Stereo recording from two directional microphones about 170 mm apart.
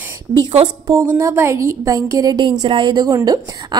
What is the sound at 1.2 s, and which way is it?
A woman's voice, 15° right (ahead or behind).